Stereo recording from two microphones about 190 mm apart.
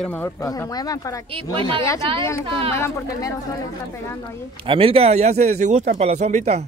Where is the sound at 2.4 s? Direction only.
30° right (ahead or behind).